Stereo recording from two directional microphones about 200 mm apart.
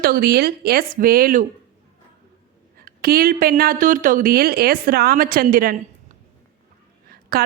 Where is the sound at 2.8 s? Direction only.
50° right (ahead or behind).